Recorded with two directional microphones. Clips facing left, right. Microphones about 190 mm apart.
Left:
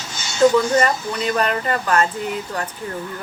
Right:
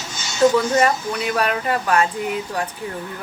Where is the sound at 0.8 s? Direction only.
10° right (ahead or behind).